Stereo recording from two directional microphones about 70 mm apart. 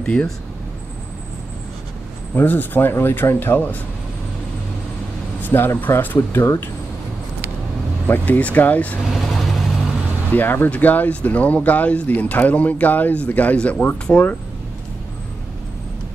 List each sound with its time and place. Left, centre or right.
0.0 s speech: centre
2.3 s speech: left
5.4 s speech: left
8.1 s speech: left
9.0 s vehicle: centre
10.3 s speech: left